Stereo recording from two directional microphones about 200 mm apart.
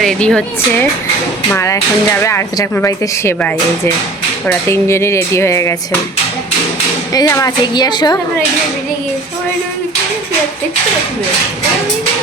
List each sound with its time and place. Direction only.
0.0 s speech: 5° left (ahead or behind)
4.7 s speech: 15° left (ahead or behind)
7.1 s a woman's voice: 15° left (ahead or behind)